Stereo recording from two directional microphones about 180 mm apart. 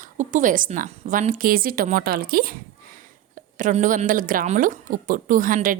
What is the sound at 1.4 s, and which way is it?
A woman's voice, 55° right (ahead or behind).